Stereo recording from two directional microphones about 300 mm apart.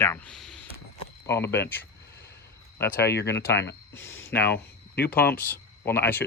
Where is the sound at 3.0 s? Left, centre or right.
Left.